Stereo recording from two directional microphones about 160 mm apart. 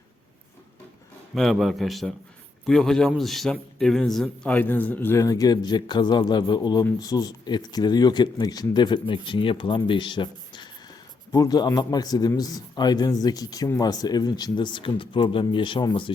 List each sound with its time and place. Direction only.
1.4 s a man's voice: centre (ahead or behind); by 16.1 s 30° left (ahead or behind)